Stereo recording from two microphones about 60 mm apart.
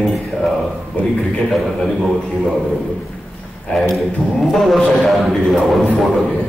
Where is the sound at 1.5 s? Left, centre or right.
Centre.